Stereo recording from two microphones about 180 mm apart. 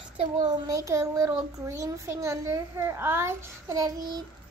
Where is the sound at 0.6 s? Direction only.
20° right (ahead or behind).